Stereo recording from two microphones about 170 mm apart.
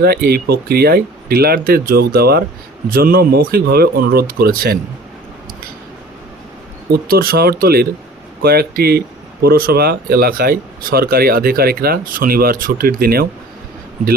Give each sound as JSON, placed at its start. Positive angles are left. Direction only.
{"t": 0.0, "sound": "speech", "side_deg": -65}
{"t": 6.9, "sound": "speech", "side_deg": -60}